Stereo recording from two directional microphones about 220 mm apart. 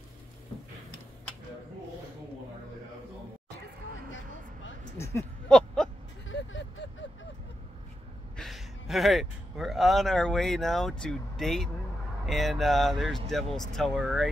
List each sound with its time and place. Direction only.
4.9 s a sound: 10° left (ahead or behind)
6.2 s vehicle: 55° left (ahead or behind)
8.4 s speech: centre (ahead or behind)